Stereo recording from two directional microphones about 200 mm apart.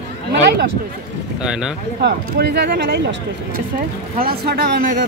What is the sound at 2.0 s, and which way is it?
Speech, 55° right (ahead or behind).